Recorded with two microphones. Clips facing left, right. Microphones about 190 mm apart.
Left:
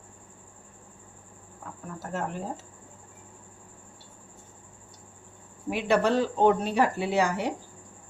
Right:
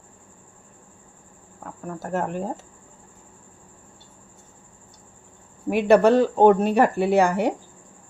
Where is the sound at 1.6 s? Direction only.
50° right (ahead or behind).